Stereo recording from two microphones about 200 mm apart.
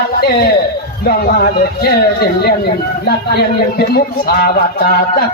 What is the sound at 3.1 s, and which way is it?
A man's voice, 55° left (ahead or behind).